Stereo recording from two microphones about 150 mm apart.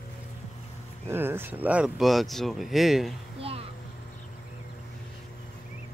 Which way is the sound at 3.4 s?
40° right (ahead or behind).